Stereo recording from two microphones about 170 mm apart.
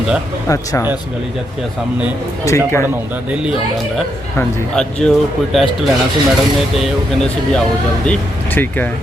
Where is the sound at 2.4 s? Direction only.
15° left (ahead or behind).